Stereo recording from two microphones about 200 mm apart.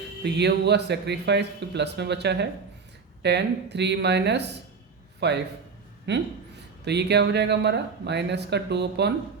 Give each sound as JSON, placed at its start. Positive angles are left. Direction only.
{"t": 0.2, "sound": "speech", "side_deg": -55}